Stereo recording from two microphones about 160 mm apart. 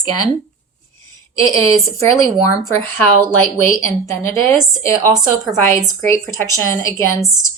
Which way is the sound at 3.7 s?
15° left (ahead or behind).